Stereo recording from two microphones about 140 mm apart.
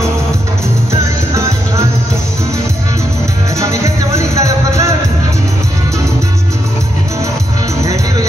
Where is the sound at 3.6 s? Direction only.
20° right (ahead or behind).